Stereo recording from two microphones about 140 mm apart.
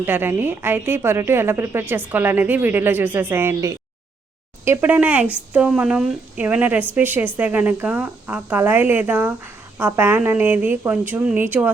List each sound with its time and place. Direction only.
0.0 s a woman's voice: 15° right (ahead or behind)